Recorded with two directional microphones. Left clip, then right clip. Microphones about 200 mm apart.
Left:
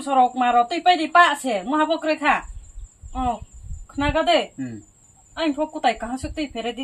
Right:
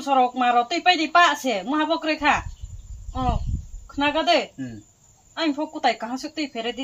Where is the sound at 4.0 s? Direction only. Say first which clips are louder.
Left 1 dB; 20° left (ahead or behind).